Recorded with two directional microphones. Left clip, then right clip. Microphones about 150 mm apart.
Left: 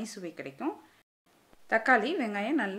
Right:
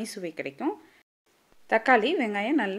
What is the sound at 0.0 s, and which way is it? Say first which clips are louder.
A woman's voice: right 6 dB; 30° right (ahead or behind).